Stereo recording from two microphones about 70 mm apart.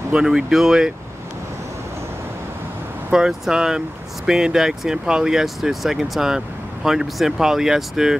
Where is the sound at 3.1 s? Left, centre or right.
Centre.